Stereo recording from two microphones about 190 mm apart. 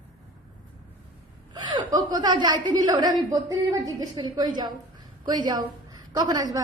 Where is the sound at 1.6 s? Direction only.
20° right (ahead or behind).